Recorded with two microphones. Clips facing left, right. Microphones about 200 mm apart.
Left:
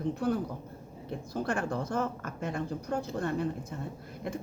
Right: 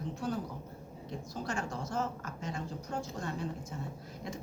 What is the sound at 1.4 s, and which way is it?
Speech, 60° left (ahead or behind).